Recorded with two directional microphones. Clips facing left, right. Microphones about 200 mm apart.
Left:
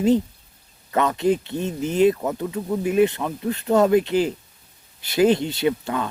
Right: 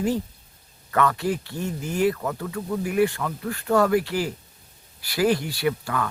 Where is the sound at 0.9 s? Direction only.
20° left (ahead or behind).